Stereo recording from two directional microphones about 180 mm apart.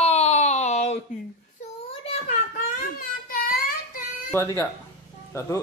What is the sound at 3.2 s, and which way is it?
Child singing, 55° left (ahead or behind).